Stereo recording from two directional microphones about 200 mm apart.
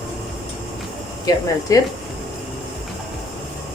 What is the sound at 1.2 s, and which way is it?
Speech, 20° left (ahead or behind).